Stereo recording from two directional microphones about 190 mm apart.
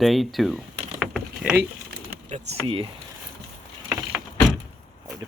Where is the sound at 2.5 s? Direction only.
30° right (ahead or behind).